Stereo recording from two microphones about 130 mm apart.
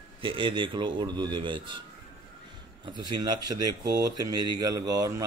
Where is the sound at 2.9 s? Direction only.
35° right (ahead or behind).